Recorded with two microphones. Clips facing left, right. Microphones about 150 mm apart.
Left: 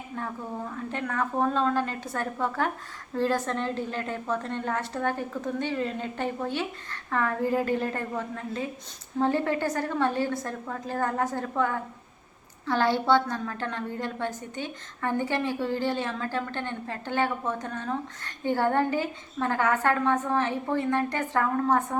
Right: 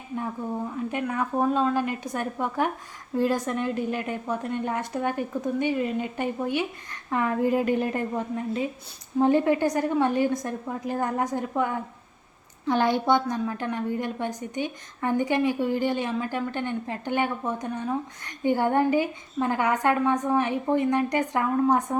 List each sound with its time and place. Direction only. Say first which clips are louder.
0.9 s a woman's voice: even; 10° right (ahead or behind)